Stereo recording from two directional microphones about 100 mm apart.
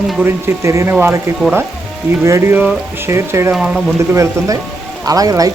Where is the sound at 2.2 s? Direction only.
25° right (ahead or behind).